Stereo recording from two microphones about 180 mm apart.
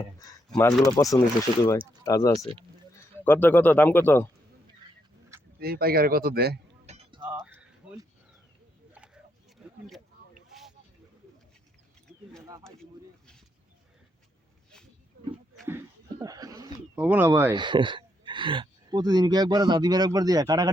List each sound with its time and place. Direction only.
0.5 s speech: 5° left (ahead or behind)
1.1 s speech: 20° left (ahead or behind)
5.5 s speech: 60° right (ahead or behind)
6.8 s chink: 35° right (ahead or behind)
7.2 s a sound: 10° right (ahead or behind)
12.5 s a sound: 20° right (ahead or behind)
16.2 s bird: 20° right (ahead or behind)
17.0 s speech: 10° right (ahead or behind)
17.5 s speech: 25° right (ahead or behind)